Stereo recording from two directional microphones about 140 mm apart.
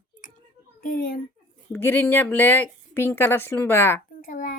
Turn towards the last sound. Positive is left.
turn(degrees=80)